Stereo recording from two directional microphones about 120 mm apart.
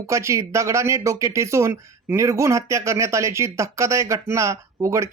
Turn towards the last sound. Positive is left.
turn(degrees=-25)  # may be behind; listen again after turning